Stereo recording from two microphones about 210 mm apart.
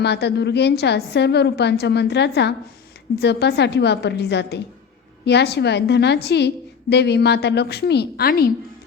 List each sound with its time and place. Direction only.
0.0 s a woman's voice: 55° left (ahead or behind)